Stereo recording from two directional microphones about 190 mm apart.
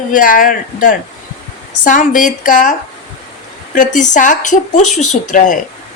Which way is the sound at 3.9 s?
40° left (ahead or behind).